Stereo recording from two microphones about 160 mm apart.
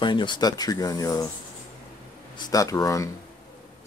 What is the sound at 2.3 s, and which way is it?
Speech, 20° left (ahead or behind).